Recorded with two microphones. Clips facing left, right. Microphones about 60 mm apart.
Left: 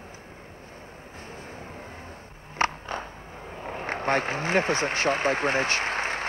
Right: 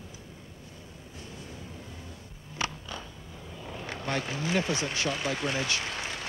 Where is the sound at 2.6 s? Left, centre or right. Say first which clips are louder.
Left 8 dB; left.